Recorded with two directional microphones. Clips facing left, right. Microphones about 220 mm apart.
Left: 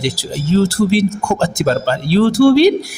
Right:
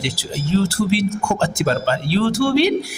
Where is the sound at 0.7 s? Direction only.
40° left (ahead or behind).